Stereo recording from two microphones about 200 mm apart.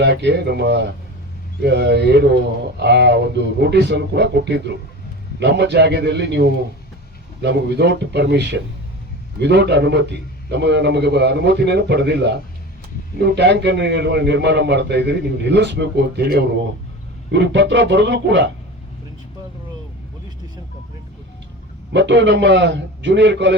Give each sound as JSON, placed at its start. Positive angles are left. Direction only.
{"t": 0.0, "sound": "a man's voice", "side_deg": -60}
{"t": 21.9, "sound": "a man's voice", "side_deg": -60}